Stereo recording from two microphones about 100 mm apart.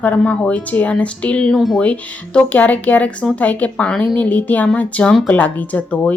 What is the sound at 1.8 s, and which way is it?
A woman's voice, 15° left (ahead or behind).